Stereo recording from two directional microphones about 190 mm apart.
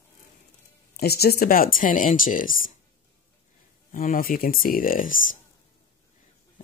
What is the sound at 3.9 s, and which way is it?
Speech, 45° left (ahead or behind).